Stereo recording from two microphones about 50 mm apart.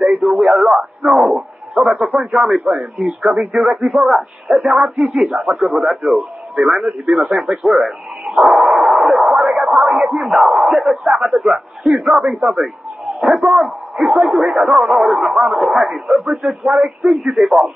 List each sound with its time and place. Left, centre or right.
0.0 s a man's voice: centre